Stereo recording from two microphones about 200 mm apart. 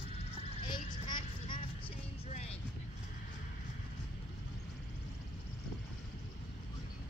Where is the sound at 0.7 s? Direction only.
25° left (ahead or behind).